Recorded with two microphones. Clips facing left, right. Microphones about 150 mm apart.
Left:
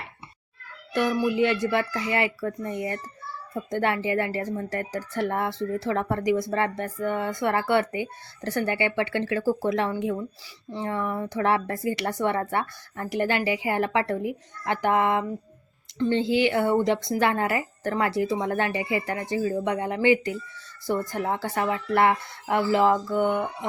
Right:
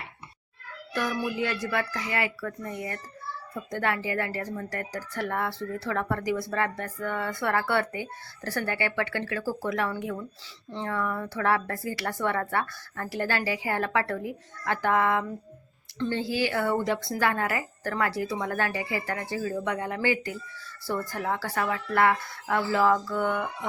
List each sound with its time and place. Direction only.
0.9 s speech: 25° left (ahead or behind)